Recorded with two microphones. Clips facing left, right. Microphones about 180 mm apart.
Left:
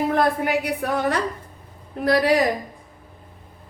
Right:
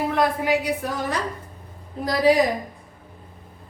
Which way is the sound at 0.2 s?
60° left (ahead or behind).